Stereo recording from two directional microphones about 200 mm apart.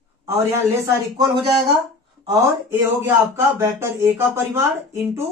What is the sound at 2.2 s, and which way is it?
Speech, 15° right (ahead or behind).